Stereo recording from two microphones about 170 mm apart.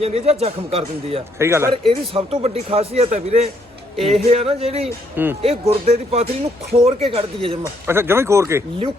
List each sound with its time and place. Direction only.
0.0 s a man's voice: 35° right (ahead or behind)
1.4 s speech: 15° right (ahead or behind)
1.7 s a man's voice: 35° right (ahead or behind)
5.1 s speech: 10° right (ahead or behind)
5.4 s a man's voice: 35° right (ahead or behind)
7.6 s speech: 15° right (ahead or behind)